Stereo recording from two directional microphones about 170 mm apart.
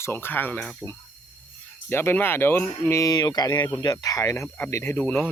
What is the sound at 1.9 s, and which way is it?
Speech, 15° left (ahead or behind).